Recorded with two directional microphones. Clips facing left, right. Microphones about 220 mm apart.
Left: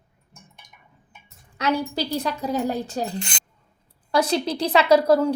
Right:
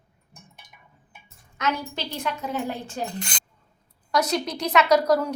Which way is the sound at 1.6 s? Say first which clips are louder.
Left 5 dB; 35° left (ahead or behind).